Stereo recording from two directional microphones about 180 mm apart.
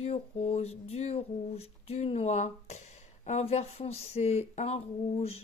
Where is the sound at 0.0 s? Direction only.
35° left (ahead or behind).